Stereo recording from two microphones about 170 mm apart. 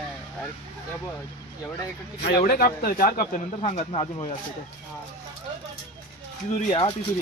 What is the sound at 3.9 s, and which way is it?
Speech, 35° left (ahead or behind).